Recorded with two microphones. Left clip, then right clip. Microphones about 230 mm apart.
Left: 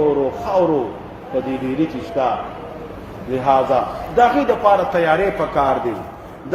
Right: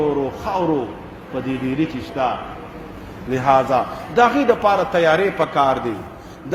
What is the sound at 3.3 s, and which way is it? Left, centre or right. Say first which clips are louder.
A man's voice: even; right.